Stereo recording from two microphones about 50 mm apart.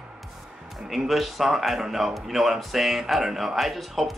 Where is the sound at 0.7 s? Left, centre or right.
Centre.